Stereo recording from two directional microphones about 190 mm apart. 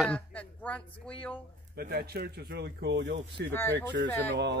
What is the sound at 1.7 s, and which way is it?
Speech, 55° right (ahead or behind).